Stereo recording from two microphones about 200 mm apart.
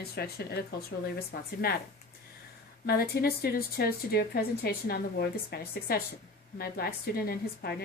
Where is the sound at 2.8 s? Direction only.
50° left (ahead or behind).